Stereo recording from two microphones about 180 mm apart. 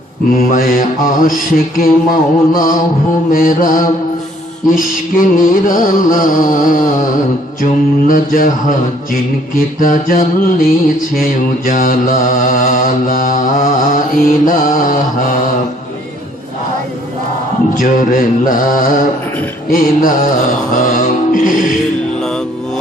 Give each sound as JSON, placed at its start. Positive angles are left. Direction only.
{"t": 0.5, "sound": "music", "side_deg": 50}
{"t": 17.7, "sound": "music", "side_deg": 50}